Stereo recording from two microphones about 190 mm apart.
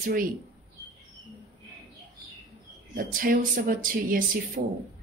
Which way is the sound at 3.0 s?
50° right (ahead or behind).